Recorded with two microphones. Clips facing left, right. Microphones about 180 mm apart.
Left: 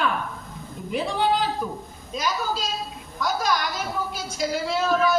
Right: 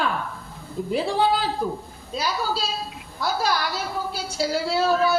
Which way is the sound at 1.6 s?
30° right (ahead or behind).